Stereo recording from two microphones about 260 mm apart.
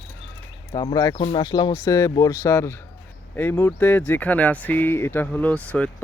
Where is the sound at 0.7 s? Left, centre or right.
Centre.